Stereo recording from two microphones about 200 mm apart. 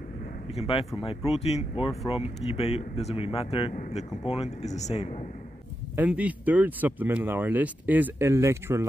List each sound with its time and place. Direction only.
0.6 s speech: 30° left (ahead or behind)
5.9 s speech: 5° right (ahead or behind)